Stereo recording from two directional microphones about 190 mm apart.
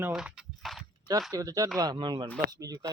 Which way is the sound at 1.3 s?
20° right (ahead or behind).